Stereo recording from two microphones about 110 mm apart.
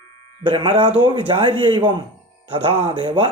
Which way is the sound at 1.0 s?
50° right (ahead or behind).